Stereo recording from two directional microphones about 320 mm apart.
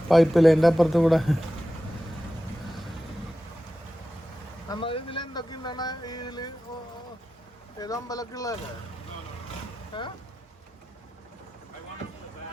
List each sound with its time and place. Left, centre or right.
0.1 s speech: centre
4.7 s a sound: centre
7.8 s speech: centre
9.9 s speech: centre